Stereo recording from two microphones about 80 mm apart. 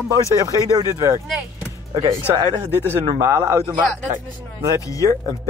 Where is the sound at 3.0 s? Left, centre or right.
Right.